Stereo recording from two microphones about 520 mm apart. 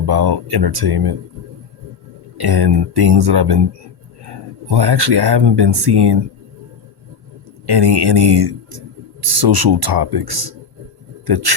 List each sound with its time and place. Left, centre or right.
0.0 s speech: right
2.4 s speech: right
4.7 s speech: right
7.7 s speech: right